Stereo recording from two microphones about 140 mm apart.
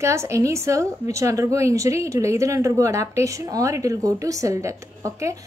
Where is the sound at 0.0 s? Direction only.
20° right (ahead or behind).